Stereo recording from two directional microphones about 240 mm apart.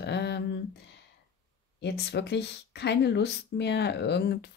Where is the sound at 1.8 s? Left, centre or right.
Left.